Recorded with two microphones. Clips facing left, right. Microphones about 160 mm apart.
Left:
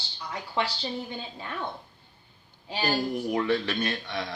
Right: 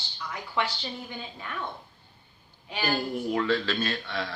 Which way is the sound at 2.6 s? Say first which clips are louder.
Left 1 dB; 35° left (ahead or behind).